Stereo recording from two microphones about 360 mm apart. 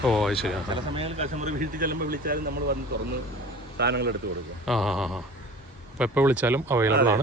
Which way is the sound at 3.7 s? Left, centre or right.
Right.